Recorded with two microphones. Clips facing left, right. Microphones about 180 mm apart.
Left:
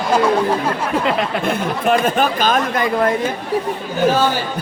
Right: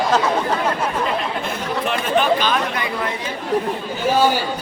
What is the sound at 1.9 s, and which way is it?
A man's voice, 45° left (ahead or behind).